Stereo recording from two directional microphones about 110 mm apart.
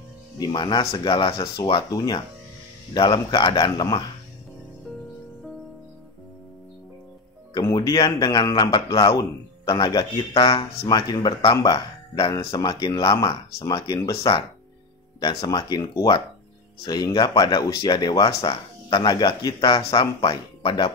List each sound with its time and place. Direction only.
0.5 s speech: 45° left (ahead or behind)
7.7 s speech: 35° left (ahead or behind)
15.1 s speech: 35° left (ahead or behind)